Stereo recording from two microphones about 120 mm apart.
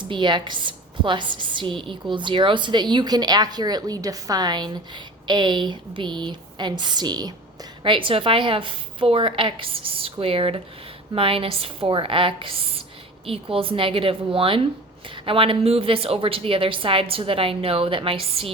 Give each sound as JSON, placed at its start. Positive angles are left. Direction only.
{"t": 0.0, "sound": "a woman's voice", "side_deg": -40}